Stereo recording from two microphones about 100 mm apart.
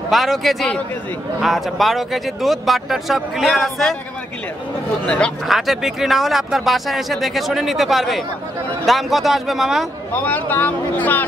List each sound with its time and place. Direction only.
0.1 s speech: centre (ahead or behind)
5.0 s speech: 10° left (ahead or behind)
5.5 s speech: centre (ahead or behind)
10.1 s speech: 20° left (ahead or behind)